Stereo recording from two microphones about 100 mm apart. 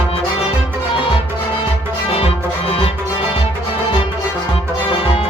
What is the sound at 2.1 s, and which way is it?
Music, 70° left (ahead or behind).